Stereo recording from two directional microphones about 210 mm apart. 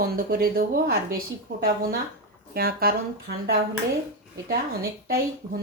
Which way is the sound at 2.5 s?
45° right (ahead or behind).